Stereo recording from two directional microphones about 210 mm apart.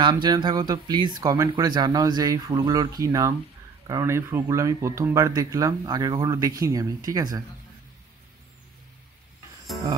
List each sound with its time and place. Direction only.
0.0 s speech: 20° right (ahead or behind)